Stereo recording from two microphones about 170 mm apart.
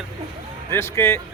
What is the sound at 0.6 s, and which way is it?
Speech, 15° left (ahead or behind).